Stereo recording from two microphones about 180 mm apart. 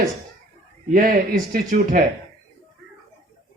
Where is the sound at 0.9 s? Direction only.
55° right (ahead or behind).